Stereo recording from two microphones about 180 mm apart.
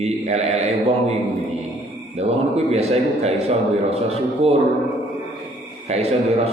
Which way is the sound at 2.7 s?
35° right (ahead or behind).